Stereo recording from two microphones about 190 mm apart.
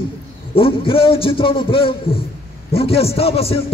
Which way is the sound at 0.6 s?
30° left (ahead or behind).